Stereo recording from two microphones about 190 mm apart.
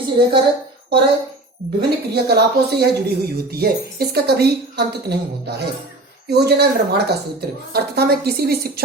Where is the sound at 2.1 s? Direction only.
60° right (ahead or behind).